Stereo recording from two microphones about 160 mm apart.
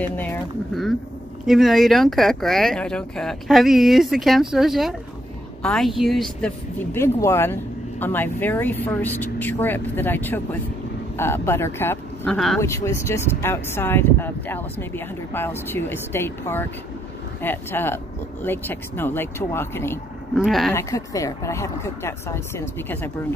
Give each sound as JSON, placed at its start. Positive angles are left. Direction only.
{"t": 0.0, "sound": "speech", "side_deg": 10}
{"t": 1.4, "sound": "speech", "side_deg": 0}
{"t": 6.9, "sound": "speech", "side_deg": 15}
{"t": 20.3, "sound": "speech", "side_deg": 0}
{"t": 20.7, "sound": "speech", "side_deg": 20}